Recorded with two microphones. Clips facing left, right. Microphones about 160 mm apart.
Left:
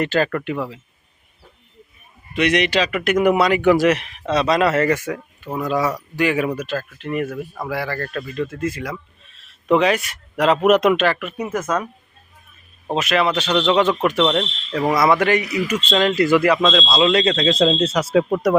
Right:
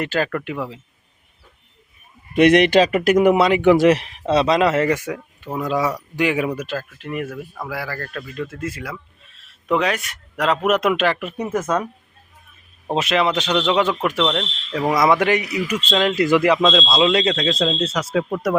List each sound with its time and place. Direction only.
0.0 s speech: 5° right (ahead or behind)
2.3 s a man's voice: 50° right (ahead or behind); by 11.0 s centre (ahead or behind)
11.2 s speech: 35° right (ahead or behind)
13.0 s speech: 25° right (ahead or behind); by 14.8 s centre (ahead or behind)
14.8 s speech: 10° right (ahead or behind)
17.3 s speech: 5° left (ahead or behind)